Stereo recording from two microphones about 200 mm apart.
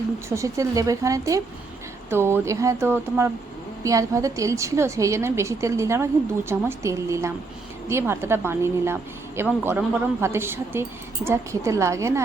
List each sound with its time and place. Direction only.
0.3 s a woman's voice: 15° right (ahead or behind)